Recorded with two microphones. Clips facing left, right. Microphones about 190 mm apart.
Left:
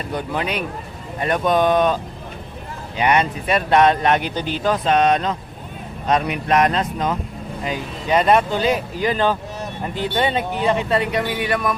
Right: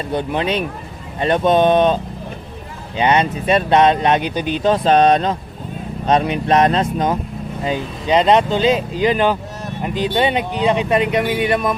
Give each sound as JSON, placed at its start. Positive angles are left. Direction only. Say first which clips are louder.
{"t": 0.1, "sound": "speech", "louder": "right 5 dB", "side_deg": -25}
{"t": 3.0, "sound": "speech", "louder": "right 2 dB", "side_deg": -25}